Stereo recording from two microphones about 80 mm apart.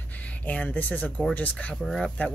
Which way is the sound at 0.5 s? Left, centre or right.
Centre.